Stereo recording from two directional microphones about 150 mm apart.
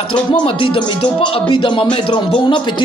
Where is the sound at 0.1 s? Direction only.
35° left (ahead or behind).